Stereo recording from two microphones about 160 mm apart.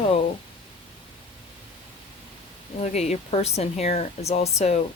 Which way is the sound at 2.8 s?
45° left (ahead or behind).